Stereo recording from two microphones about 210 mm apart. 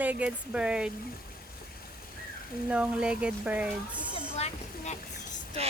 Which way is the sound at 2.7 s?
5° right (ahead or behind).